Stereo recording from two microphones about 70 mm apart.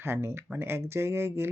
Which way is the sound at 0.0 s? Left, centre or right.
Right.